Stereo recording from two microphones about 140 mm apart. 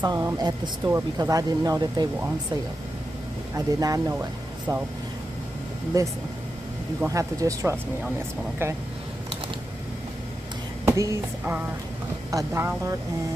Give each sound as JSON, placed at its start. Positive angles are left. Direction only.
{"t": 0.0, "sound": "speech", "side_deg": -25}
{"t": 3.5, "sound": "speech", "side_deg": -25}
{"t": 5.9, "sound": "speech", "side_deg": -25}
{"t": 10.9, "sound": "speech", "side_deg": -20}